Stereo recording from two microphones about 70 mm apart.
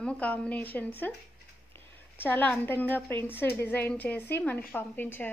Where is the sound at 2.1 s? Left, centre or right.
Left.